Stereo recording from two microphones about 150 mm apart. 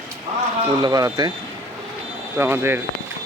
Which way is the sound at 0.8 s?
25° right (ahead or behind).